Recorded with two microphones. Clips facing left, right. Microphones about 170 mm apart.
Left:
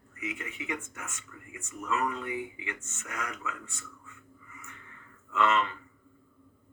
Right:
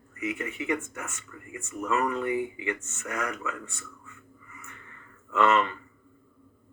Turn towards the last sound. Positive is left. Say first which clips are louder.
# right 4 dB
turn(degrees=-60)  # may be behind; listen again after turning